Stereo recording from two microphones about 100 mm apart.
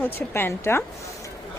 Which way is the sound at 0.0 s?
20° left (ahead or behind).